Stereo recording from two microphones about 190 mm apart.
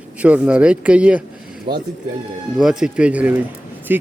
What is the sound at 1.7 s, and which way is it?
Speech, 25° right (ahead or behind).